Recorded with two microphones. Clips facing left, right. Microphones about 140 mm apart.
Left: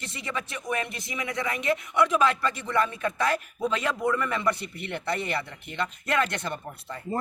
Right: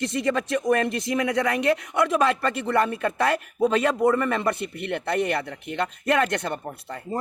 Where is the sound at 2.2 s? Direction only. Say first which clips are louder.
Right 2 dB; 60° right (ahead or behind).